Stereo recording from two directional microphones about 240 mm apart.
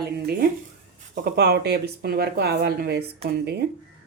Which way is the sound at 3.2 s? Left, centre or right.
Right.